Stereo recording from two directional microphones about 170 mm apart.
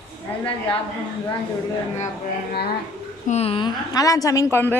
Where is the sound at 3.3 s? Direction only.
35° left (ahead or behind); by 4.7 s 15° left (ahead or behind).